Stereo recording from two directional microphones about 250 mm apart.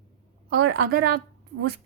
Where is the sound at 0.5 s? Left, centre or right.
Right.